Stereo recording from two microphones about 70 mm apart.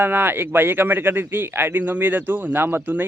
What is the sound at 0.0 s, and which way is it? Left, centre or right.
Speech, right.